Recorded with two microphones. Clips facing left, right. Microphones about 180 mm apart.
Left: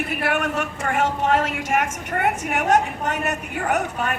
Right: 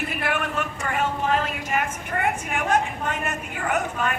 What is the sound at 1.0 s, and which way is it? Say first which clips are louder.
A woman's voice: left 3 dB; 85° left.